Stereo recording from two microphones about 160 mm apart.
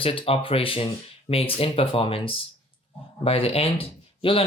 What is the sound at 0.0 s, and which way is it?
Speech, 35° left (ahead or behind).